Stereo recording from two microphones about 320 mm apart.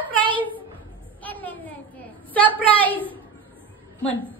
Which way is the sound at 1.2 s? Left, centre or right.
Centre.